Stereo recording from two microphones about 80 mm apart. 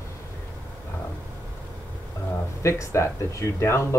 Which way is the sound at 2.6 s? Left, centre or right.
Left.